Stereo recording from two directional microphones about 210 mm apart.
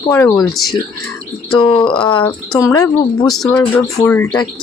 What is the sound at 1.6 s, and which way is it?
Speech, 25° left (ahead or behind).